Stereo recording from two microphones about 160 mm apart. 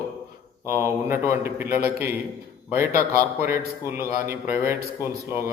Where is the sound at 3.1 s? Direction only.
15° right (ahead or behind).